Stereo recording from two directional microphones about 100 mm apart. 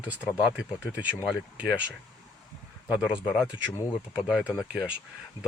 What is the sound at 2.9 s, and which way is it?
Speech, 10° right (ahead or behind).